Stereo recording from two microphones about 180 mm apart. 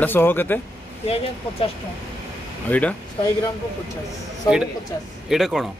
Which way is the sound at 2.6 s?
10° left (ahead or behind).